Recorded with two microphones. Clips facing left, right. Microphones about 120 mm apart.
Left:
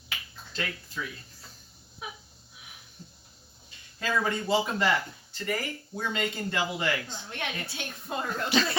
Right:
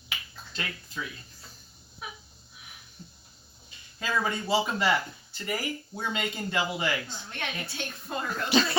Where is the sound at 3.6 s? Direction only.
10° right (ahead or behind).